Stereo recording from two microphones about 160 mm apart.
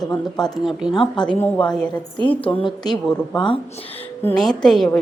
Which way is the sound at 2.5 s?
35° left (ahead or behind).